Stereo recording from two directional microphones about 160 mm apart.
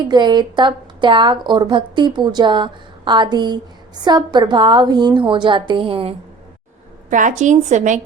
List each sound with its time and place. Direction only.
0.1 s a woman's voice: 25° right (ahead or behind)
7.1 s a woman's voice: 55° right (ahead or behind)